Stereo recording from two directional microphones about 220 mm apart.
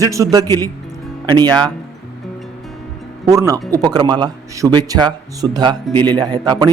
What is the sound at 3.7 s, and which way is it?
Speech, 20° right (ahead or behind).